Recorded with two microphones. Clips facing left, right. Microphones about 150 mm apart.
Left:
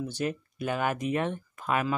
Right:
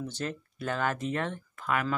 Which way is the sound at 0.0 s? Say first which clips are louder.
Left 4 dB; 15° left (ahead or behind).